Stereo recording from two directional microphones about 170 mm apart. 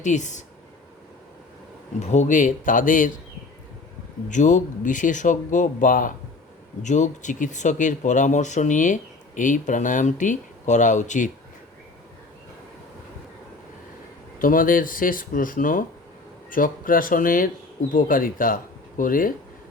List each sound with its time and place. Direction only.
0.0 s speech: 45° left (ahead or behind)
2.0 s speech: 45° left (ahead or behind)
4.3 s speech: 45° left (ahead or behind)
14.3 s speech: 55° left (ahead or behind)